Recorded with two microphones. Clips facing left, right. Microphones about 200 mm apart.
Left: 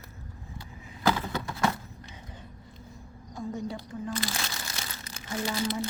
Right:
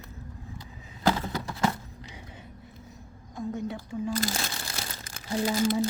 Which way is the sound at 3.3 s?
Centre (ahead or behind).